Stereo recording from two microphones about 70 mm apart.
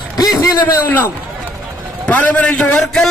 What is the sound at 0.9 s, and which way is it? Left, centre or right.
Speech, left.